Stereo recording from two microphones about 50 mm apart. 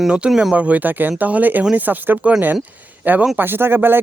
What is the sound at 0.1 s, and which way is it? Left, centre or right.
A man's voice, centre.